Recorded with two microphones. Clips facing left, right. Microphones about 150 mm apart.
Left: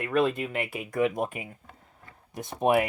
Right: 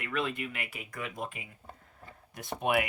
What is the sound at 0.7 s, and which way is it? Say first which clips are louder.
Speech: left 13 dB; 50° left (ahead or behind).